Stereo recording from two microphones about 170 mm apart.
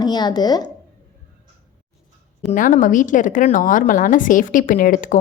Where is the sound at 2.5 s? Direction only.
50° left (ahead or behind).